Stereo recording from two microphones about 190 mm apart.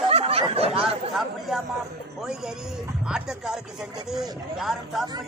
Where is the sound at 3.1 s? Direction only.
5° right (ahead or behind).